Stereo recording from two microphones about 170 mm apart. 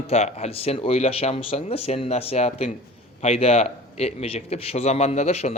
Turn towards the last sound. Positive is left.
turn(degrees=40)  # may be behind; listen again after turning